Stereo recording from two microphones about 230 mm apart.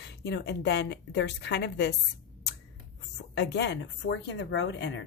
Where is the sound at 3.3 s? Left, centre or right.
Left.